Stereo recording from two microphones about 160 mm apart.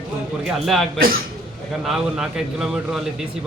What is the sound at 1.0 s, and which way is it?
Speech, 65° right (ahead or behind).